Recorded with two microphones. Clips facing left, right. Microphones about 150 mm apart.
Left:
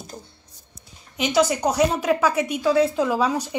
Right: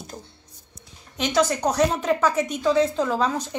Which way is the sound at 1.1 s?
10° left (ahead or behind).